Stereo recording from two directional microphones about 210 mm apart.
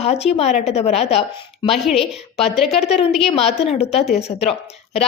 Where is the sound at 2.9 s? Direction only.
30° left (ahead or behind).